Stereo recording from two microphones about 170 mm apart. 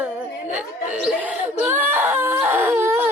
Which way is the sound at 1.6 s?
10° right (ahead or behind).